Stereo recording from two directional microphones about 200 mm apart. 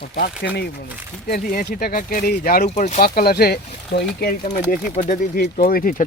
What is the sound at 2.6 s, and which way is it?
Speech, 35° left (ahead or behind).